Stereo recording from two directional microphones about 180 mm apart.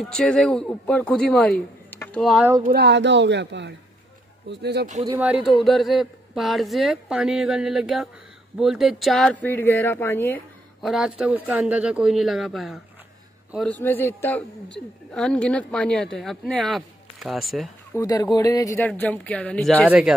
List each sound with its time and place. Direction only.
0.0 s speech: 5° left (ahead or behind)
2.2 s speech: 5° right (ahead or behind)
2.7 s speech: 70° right (ahead or behind)
5.0 s speech: 10° right (ahead or behind); by 10.4 s 10° left (ahead or behind)
10.8 s speech: centre (ahead or behind)
13.8 s speech: 10° left (ahead or behind)
17.9 s speech: 20° left (ahead or behind)
18.9 s speech: 10° left (ahead or behind)
19.9 s speech: 5° right (ahead or behind)